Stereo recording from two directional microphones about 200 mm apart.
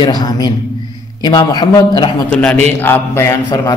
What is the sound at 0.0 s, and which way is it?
A man's voice, 20° left (ahead or behind).